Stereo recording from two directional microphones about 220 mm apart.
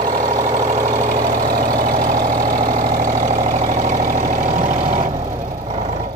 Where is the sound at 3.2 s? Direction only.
35° right (ahead or behind).